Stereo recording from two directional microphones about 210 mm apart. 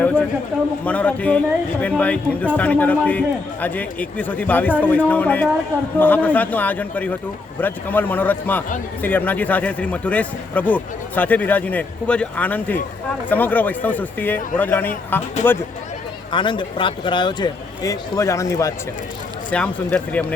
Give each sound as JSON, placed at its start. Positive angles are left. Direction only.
{"t": 0.0, "sound": "a sound", "side_deg": 5}
{"t": 0.9, "sound": "speech", "side_deg": 5}
{"t": 16.3, "sound": "speech", "side_deg": 20}